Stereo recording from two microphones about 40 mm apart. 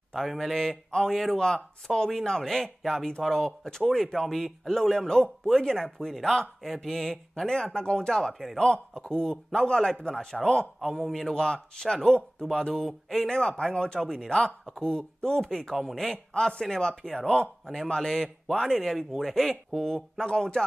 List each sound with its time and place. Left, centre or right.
0.1 s a man's voice: centre
15.7 s a man's voice: centre
16.0 s speech: centre